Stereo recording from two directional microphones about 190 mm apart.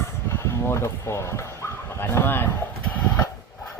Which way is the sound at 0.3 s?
15° left (ahead or behind).